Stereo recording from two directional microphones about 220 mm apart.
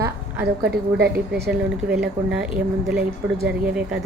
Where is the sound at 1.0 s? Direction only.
45° right (ahead or behind).